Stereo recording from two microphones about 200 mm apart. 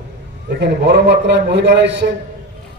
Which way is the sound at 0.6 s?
60° right (ahead or behind).